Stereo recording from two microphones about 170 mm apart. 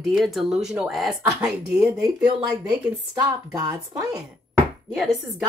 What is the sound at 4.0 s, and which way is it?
Speech, 20° right (ahead or behind).